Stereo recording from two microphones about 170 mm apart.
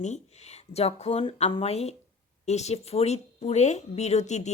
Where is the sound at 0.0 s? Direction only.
40° left (ahead or behind).